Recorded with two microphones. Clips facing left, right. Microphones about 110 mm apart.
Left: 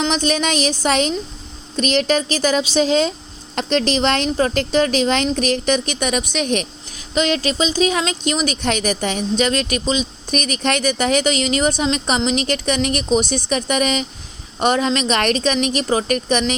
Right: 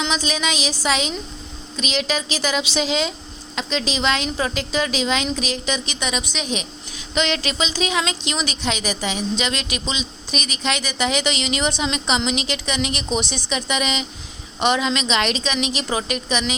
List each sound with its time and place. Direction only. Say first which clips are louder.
0.0 s speech: left 5 dB; 55° left (ahead or behind)
7.1 s speech: left 4 dB; 35° left (ahead or behind)